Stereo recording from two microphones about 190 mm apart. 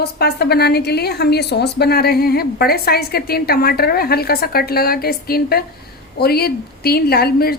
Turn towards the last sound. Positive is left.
turn(degrees=55)  # may be behind; listen again after turning